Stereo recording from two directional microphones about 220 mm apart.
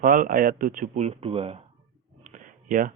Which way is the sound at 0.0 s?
40° right (ahead or behind).